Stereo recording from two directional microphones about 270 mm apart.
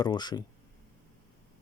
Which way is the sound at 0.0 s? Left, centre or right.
Centre.